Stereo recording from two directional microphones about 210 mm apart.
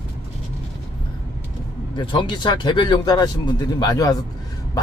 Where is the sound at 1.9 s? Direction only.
20° left (ahead or behind).